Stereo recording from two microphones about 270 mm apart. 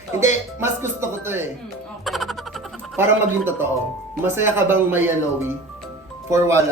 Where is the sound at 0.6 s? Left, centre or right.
Centre.